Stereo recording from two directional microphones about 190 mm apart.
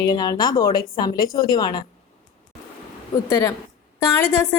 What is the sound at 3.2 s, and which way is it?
Speech, 20° left (ahead or behind).